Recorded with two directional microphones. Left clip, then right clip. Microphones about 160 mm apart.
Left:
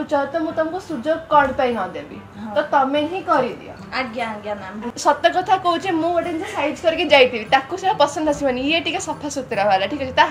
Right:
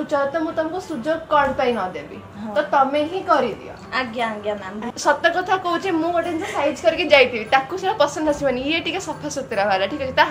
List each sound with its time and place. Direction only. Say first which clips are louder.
0.0 s a woman's voice: even; 20° left (ahead or behind)
3.9 s a woman's voice: right 1 dB; 5° right (ahead or behind)
5.0 s a woman's voice: left 2 dB; 25° left (ahead or behind)